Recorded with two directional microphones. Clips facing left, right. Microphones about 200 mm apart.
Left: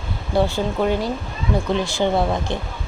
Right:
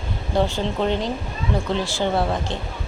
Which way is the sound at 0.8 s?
10° left (ahead or behind).